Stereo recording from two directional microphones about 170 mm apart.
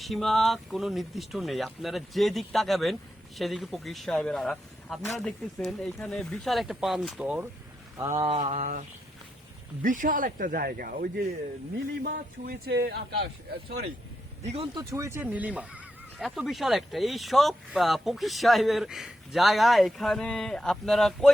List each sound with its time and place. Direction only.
0.0 s speech: centre (ahead or behind)
7.9 s mantra: 20° right (ahead or behind)
8.3 s speech: 40° right (ahead or behind)
9.8 s speech: 50° right (ahead or behind); by 13.8 s 70° right (ahead or behind)
14.4 s speech: 35° right (ahead or behind)
14.8 s speech: 20° right (ahead or behind); by 21.3 s centre (ahead or behind)